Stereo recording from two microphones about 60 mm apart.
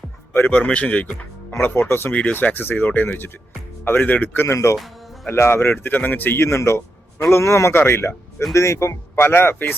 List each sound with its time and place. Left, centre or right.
0.7 s speech: left
1.6 s speech: left
4.4 s speech: left
5.3 s speech: left
6.6 s a man's voice: left
9.1 s speech: left